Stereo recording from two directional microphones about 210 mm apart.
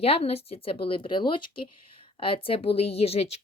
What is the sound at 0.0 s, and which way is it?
A woman's voice, 30° left (ahead or behind).